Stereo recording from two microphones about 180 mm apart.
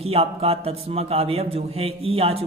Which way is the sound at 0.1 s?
35° right (ahead or behind).